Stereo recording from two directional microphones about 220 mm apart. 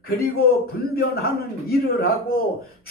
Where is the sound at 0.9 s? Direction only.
45° left (ahead or behind).